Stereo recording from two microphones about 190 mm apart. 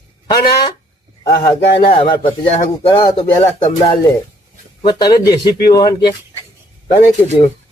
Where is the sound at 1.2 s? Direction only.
20° left (ahead or behind).